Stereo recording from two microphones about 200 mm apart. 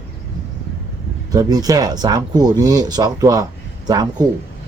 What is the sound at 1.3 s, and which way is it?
Speech, 20° right (ahead or behind).